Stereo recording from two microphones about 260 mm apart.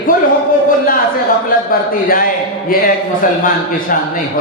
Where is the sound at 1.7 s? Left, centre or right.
Left.